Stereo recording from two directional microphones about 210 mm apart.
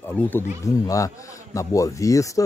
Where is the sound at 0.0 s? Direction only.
10° left (ahead or behind).